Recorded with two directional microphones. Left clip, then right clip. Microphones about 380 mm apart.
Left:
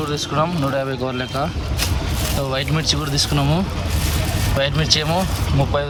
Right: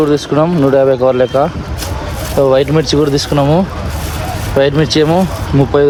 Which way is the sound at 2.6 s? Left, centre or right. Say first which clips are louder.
Right 10 dB; centre.